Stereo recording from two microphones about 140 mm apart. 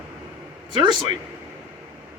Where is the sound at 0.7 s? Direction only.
30° right (ahead or behind).